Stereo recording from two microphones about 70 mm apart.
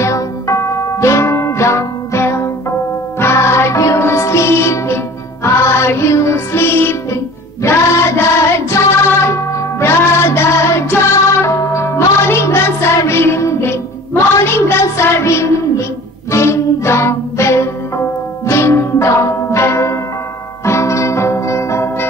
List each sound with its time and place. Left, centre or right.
0.0 s music: left